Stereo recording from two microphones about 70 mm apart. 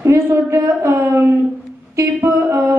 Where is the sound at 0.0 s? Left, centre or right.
Right.